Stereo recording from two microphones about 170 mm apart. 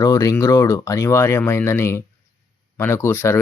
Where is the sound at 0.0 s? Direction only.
20° left (ahead or behind).